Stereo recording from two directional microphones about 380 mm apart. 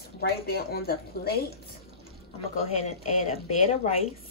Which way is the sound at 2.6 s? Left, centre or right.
Centre.